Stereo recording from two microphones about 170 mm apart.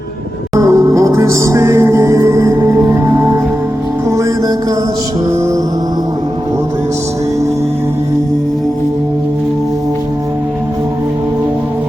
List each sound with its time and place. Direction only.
0.6 s music: 20° right (ahead or behind)